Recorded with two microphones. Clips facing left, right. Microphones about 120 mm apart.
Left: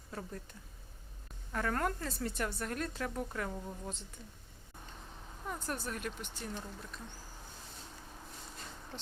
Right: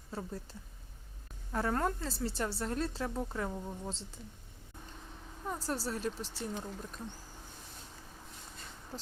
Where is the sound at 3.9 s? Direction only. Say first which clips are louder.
Right 2 dB; 30° right (ahead or behind).